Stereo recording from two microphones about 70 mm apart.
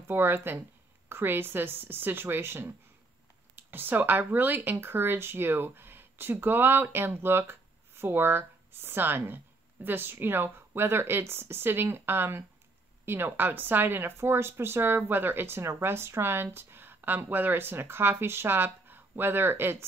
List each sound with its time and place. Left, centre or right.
0.0 s a woman's voice: right